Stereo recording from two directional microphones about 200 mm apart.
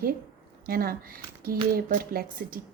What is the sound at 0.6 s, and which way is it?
Speech, 45° right (ahead or behind).